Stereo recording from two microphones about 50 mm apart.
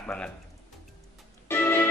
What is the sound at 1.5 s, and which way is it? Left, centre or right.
Music, left.